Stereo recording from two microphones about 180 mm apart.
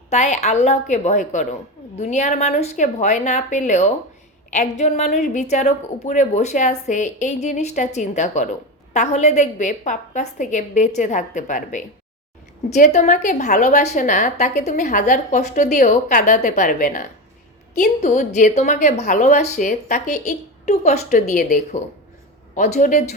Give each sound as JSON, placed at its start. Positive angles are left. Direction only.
{"t": 0.1, "sound": "a woman's voice", "side_deg": 40}